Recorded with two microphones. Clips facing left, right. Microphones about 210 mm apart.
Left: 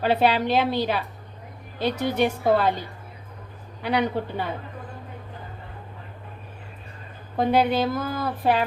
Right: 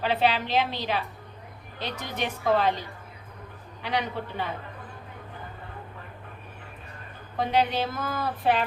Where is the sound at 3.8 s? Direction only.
40° left (ahead or behind).